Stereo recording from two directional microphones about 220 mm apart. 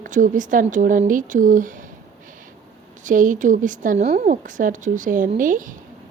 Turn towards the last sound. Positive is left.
turn(degrees=-35)  # may be behind; listen again after turning